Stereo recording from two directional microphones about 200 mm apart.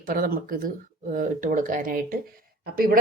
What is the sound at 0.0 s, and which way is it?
A woman's voice, 45° right (ahead or behind).